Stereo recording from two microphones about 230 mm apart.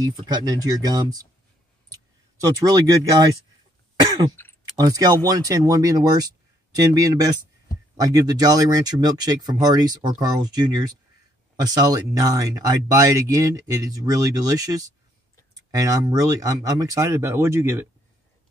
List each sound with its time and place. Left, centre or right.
0.0 s speech: centre
2.4 s speech: centre
3.9 s cough: centre
4.7 s speech: centre